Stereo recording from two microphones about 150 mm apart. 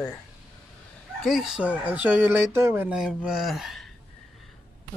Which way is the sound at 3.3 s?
Centre (ahead or behind).